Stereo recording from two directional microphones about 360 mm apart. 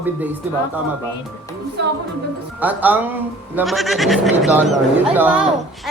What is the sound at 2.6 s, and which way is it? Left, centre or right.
Speech, centre.